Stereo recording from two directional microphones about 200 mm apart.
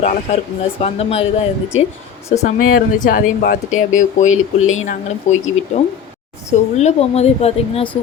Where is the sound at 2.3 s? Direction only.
40° left (ahead or behind).